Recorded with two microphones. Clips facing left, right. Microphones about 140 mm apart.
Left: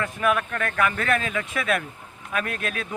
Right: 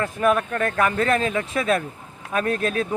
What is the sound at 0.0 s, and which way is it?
Speech, 35° right (ahead or behind).